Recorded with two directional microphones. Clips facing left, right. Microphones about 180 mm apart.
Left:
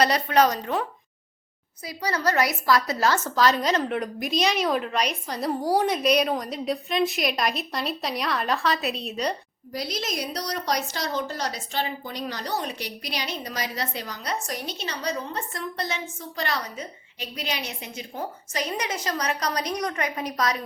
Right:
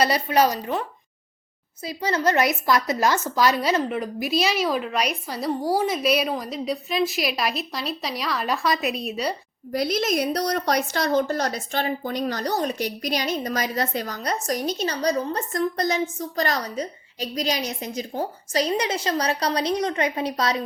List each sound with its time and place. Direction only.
0.0 s a woman's voice: 5° right (ahead or behind)
1.8 s a woman's voice: 25° right (ahead or behind); by 9.3 s 10° right (ahead or behind)
9.7 s a woman's voice: 55° right (ahead or behind); by 20.6 s 30° right (ahead or behind)